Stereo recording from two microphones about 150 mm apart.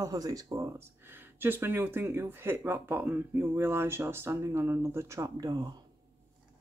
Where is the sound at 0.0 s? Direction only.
25° right (ahead or behind).